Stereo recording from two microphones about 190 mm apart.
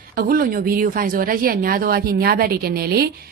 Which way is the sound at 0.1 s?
50° right (ahead or behind).